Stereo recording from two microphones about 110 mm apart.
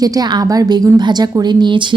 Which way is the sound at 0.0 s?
40° right (ahead or behind).